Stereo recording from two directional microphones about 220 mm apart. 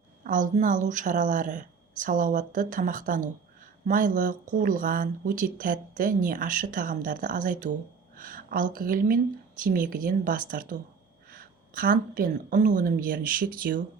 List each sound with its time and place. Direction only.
0.3 s speech: 35° right (ahead or behind)